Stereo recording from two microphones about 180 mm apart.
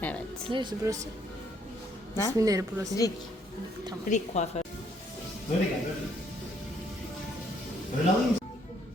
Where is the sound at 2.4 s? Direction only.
20° right (ahead or behind).